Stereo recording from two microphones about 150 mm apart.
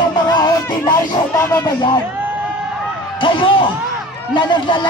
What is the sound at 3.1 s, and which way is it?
Speech, 35° left (ahead or behind).